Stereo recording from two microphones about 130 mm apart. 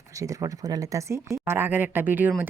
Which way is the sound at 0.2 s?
25° right (ahead or behind).